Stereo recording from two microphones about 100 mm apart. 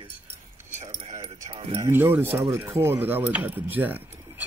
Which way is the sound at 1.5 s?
75° right (ahead or behind).